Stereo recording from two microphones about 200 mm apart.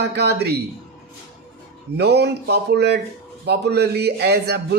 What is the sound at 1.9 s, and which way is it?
A man's voice, 55° right (ahead or behind).